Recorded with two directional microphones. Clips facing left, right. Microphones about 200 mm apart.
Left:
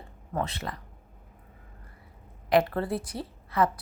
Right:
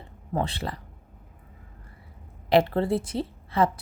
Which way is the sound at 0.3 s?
30° right (ahead or behind).